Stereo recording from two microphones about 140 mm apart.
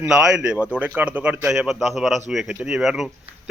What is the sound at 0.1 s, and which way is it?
A man's voice, 5° right (ahead or behind).